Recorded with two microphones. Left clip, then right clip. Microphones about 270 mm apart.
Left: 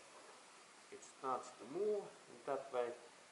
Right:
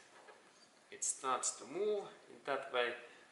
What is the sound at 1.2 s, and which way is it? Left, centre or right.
Speech, left.